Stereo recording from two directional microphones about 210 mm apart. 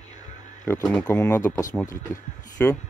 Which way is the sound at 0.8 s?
5° left (ahead or behind).